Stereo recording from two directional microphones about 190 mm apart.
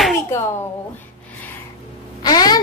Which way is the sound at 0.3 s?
15° left (ahead or behind).